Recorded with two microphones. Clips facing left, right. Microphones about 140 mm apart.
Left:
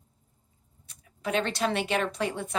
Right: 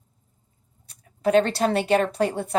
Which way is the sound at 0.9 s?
40° right (ahead or behind).